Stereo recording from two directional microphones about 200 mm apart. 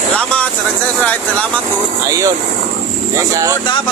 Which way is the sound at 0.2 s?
5° left (ahead or behind).